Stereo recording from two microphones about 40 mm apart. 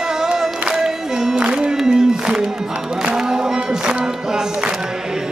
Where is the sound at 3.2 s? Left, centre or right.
Centre.